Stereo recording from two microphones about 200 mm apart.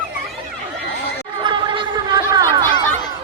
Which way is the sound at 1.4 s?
25° right (ahead or behind).